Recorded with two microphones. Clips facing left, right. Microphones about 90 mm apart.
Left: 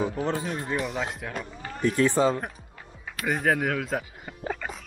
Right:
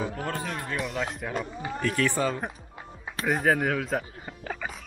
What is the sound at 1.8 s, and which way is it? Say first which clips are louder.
Speech: left 4 dB; 20° left (ahead or behind).